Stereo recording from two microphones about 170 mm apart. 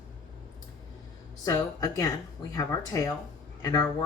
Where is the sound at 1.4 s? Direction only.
20° left (ahead or behind).